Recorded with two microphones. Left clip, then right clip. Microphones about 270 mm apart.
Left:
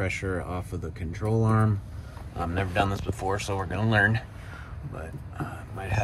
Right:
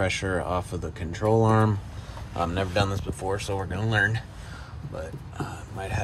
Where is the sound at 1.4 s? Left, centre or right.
Centre.